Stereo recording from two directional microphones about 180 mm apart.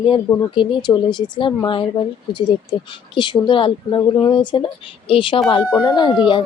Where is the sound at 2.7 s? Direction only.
25° left (ahead or behind).